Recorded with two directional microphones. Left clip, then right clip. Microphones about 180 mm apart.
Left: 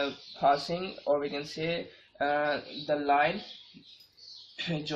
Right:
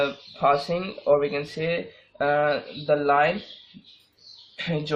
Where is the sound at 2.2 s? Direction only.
45° right (ahead or behind).